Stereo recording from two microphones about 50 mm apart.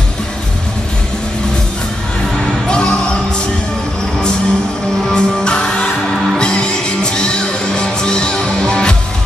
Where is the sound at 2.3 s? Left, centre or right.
Centre.